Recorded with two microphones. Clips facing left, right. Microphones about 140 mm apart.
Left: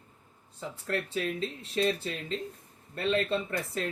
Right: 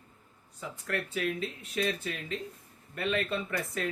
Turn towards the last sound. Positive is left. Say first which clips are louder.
# left 2 dB
turn(degrees=35)  # may be behind; listen again after turning